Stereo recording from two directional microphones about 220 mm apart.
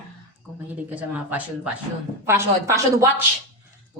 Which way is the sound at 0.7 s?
5° right (ahead or behind).